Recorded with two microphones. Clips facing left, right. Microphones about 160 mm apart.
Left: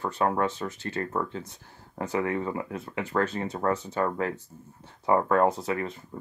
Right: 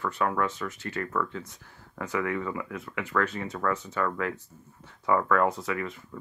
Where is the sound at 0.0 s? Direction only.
30° left (ahead or behind).